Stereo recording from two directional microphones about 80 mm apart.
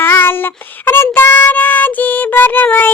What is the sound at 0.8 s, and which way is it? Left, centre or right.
Child singing, left.